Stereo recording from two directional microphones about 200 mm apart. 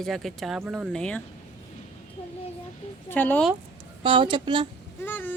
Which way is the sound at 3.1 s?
10° left (ahead or behind).